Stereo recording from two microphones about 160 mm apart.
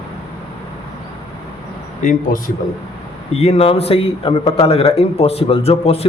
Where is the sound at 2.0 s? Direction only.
55° left (ahead or behind).